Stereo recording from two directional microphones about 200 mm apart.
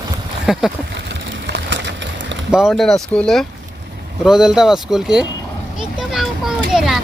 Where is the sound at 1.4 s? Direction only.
60° right (ahead or behind).